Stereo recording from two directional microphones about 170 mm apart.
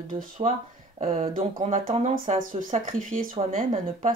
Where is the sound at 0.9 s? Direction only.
40° right (ahead or behind).